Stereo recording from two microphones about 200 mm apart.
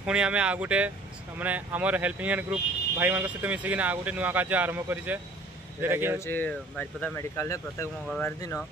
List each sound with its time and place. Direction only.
0.0 s speech: 5° right (ahead or behind)
6.1 s speech: 10° left (ahead or behind)